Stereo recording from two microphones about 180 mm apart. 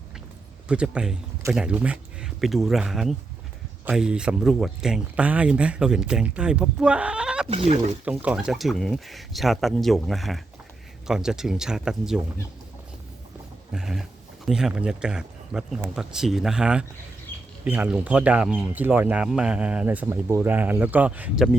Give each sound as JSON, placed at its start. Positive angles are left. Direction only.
{"t": 0.7, "sound": "speech", "side_deg": -5}
{"t": 7.4, "sound": "speech", "side_deg": -35}
{"t": 8.0, "sound": "speech", "side_deg": -10}
{"t": 13.7, "sound": "speech", "side_deg": 0}
{"t": 17.3, "sound": "a sound", "side_deg": 10}
{"t": 17.7, "sound": "speech", "side_deg": -10}